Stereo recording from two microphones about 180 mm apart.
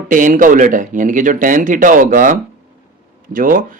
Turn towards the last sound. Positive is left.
turn(degrees=-50)  # may be behind; listen again after turning